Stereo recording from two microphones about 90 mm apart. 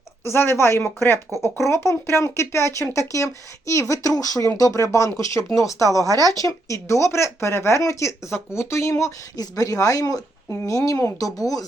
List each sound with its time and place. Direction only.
0.3 s speech: 30° left (ahead or behind)
6.1 s speech: 40° right (ahead or behind)
6.3 s speech: 35° left (ahead or behind)
11.2 s speech: 40° left (ahead or behind)